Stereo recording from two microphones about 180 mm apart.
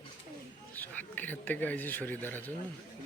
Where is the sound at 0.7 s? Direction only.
10° left (ahead or behind).